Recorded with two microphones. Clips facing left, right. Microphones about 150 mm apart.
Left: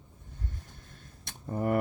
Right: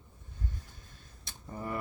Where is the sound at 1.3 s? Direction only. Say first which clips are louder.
Left 9 dB; 55° left (ahead or behind).